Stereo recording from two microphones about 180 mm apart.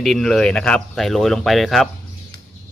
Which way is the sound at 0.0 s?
Centre (ahead or behind).